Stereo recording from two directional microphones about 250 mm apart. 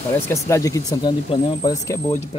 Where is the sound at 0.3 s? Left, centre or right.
Centre.